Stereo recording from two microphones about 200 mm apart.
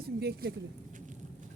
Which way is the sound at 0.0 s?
50° right (ahead or behind).